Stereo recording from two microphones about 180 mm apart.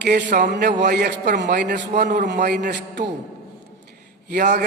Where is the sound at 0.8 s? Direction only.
65° right (ahead or behind).